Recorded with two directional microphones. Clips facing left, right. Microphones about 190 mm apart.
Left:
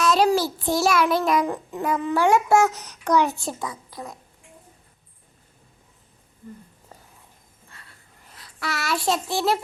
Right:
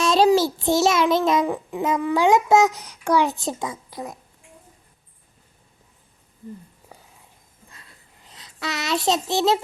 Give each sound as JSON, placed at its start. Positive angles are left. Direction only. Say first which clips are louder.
{"t": 0.0, "sound": "child singing", "louder": "right 3 dB", "side_deg": -25}
{"t": 1.5, "sound": "a child's voice", "louder": "right 2 dB", "side_deg": -15}
{"t": 8.2, "sound": "a child's voice", "louder": "right 1 dB", "side_deg": -20}